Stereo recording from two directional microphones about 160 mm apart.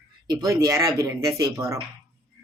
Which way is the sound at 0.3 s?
20° right (ahead or behind).